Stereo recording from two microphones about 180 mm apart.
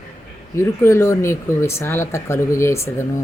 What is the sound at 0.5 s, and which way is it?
Speech, 15° left (ahead or behind).